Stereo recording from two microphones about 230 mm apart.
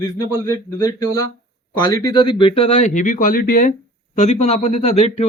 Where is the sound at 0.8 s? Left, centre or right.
Centre.